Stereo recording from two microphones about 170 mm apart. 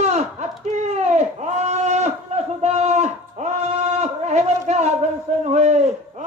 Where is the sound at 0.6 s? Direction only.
45° right (ahead or behind).